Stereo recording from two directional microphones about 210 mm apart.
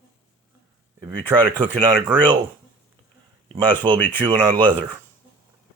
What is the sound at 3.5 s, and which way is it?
Speech, 20° right (ahead or behind).